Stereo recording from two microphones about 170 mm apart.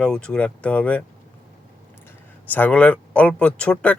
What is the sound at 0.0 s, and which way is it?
Speech, 5° left (ahead or behind).